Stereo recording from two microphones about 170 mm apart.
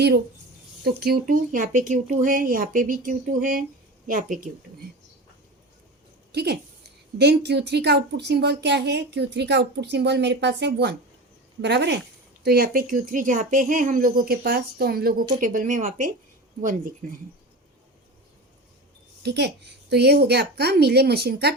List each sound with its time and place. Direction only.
0.9 s speech: 65° right (ahead or behind)
1.3 s speech: 50° right (ahead or behind)
6.3 s speech: 75° right (ahead or behind)
12.4 s speech: 65° right (ahead or behind)
19.2 s speech: 80° right